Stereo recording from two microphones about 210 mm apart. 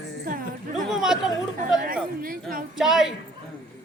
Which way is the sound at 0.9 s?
Centre (ahead or behind).